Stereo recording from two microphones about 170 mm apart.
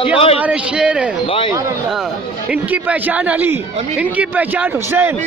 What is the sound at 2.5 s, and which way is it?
Speech, 10° right (ahead or behind).